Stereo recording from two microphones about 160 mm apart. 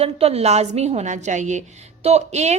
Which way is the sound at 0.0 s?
40° right (ahead or behind).